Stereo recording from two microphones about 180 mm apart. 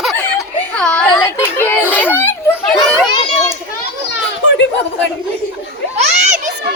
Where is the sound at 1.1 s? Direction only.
25° left (ahead or behind).